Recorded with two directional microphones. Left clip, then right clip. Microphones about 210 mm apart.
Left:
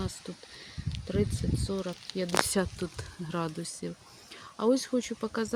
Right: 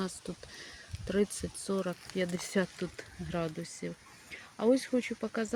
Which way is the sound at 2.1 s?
10° left (ahead or behind).